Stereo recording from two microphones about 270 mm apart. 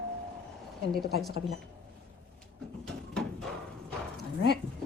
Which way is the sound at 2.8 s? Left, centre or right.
Centre.